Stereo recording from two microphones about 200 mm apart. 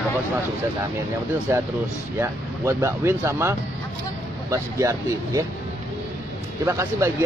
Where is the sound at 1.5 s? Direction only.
15° right (ahead or behind).